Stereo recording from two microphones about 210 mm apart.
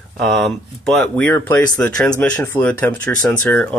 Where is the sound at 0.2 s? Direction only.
Centre (ahead or behind).